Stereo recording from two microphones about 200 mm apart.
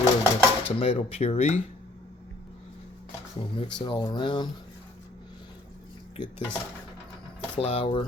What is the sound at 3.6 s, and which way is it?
Speech, 25° left (ahead or behind).